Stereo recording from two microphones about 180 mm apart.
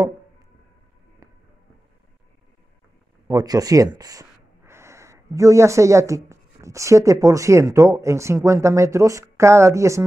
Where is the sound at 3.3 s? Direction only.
20° right (ahead or behind).